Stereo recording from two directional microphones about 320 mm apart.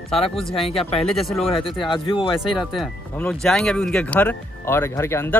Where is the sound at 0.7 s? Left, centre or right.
Centre.